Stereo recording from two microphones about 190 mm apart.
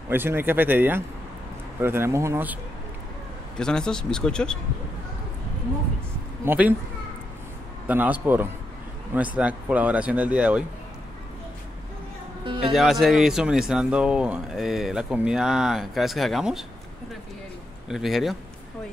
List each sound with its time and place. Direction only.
0.1 s speech: 10° right (ahead or behind)
3.5 s speech: 5° left (ahead or behind)
6.4 s speech: 10° right (ahead or behind)
7.8 s speech: 10° right (ahead or behind)
12.4 s speech: 25° right (ahead or behind)
12.7 s speech: centre (ahead or behind)
17.8 s speech: centre (ahead or behind)